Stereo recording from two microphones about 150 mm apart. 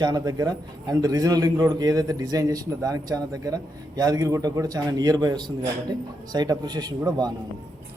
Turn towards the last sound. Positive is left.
turn(degrees=-25)  # may be behind; listen again after turning